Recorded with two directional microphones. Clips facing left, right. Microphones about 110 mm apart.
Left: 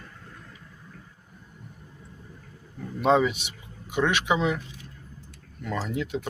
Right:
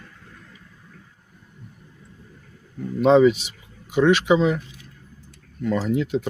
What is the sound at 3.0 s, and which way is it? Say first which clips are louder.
Speech: right 7 dB; 5° left (ahead or behind).